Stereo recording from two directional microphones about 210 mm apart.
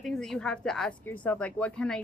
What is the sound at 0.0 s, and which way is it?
A woman's voice, centre (ahead or behind).